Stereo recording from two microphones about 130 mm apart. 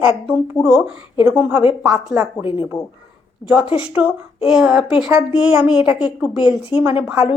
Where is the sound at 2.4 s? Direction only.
40° left (ahead or behind).